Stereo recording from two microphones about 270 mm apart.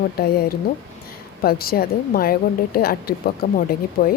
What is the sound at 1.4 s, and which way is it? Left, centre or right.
A woman's voice, left.